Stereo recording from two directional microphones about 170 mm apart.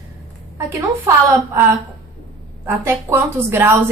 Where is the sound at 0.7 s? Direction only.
15° right (ahead or behind).